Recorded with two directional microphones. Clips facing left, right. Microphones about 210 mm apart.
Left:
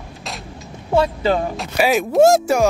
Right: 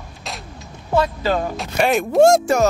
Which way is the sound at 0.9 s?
25° left (ahead or behind).